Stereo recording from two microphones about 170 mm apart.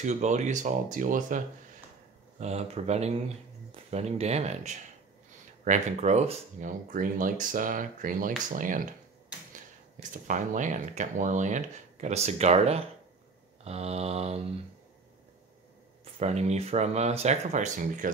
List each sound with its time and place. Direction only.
0.0 s speech: 45° right (ahead or behind)
2.4 s speech: 40° right (ahead or behind)
10.1 s speech: 50° right (ahead or behind)
16.2 s speech: 40° right (ahead or behind)